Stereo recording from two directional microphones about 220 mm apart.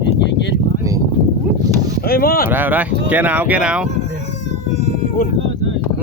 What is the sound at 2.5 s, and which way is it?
Speech, 10° right (ahead or behind).